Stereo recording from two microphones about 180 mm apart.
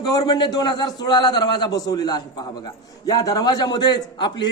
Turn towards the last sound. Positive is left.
turn(degrees=25)  # may be behind; listen again after turning